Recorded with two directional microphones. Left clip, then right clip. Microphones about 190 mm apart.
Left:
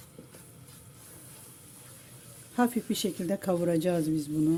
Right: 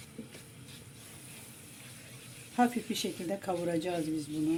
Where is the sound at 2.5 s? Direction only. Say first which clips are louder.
Left 1 dB; 50° left (ahead or behind); by 4.2 s 65° left (ahead or behind).